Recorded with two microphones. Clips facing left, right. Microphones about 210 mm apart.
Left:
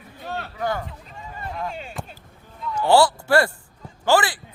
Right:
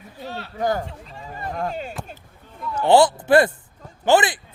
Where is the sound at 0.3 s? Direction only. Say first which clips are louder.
Left 2 dB; 50° left (ahead or behind).